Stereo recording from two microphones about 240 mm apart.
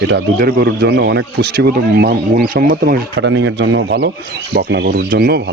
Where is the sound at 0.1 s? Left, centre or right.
Right.